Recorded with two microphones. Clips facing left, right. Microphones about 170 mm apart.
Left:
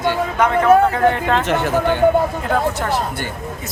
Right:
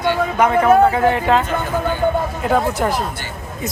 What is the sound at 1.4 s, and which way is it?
Speech, 85° left.